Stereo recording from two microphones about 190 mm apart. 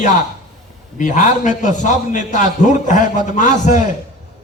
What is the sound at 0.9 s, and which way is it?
A man's voice, 40° left (ahead or behind).